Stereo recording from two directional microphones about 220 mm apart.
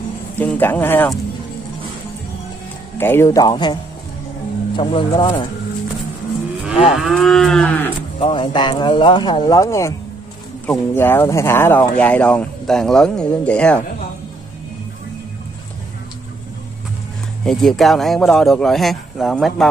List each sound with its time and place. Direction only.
0.4 s speech: 10° left (ahead or behind)
3.0 s speech: 10° left (ahead or behind)
4.7 s speech: 20° left (ahead or behind)
7.0 s speech: centre (ahead or behind)
8.2 s speech: 20° left (ahead or behind); by 13.8 s 5° left (ahead or behind)
17.5 s speech: centre (ahead or behind)